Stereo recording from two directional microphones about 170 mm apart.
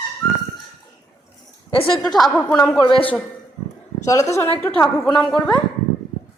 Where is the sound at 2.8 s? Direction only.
30° left (ahead or behind).